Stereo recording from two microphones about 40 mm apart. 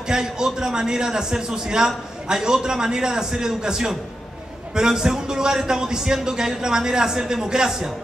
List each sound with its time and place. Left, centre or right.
0.1 s a man's voice: centre